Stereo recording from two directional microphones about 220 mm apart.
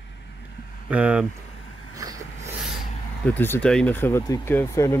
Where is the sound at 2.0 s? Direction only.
15° right (ahead or behind).